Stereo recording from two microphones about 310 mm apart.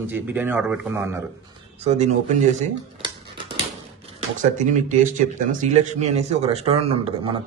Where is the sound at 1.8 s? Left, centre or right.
Right.